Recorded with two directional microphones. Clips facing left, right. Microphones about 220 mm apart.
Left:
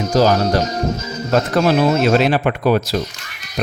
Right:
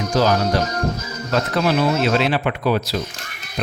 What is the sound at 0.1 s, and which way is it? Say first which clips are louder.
Speech: left 3 dB; 40° left (ahead or behind).